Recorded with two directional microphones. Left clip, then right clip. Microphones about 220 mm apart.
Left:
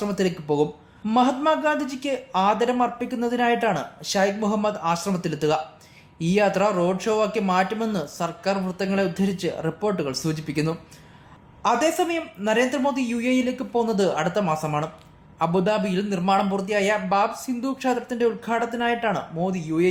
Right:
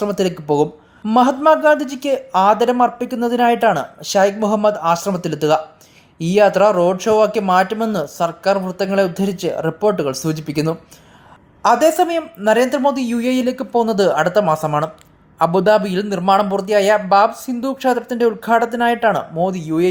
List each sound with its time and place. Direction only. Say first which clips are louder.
0.0 s speech: right 6 dB; 25° right (ahead or behind)